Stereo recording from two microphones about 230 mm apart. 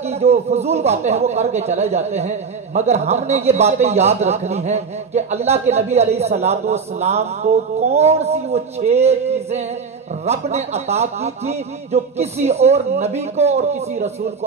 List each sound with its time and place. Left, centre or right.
0.0 s speech: right